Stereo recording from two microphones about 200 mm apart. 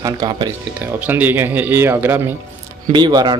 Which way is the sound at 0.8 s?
10° right (ahead or behind).